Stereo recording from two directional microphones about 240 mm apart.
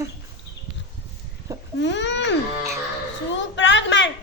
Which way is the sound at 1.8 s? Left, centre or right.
Left.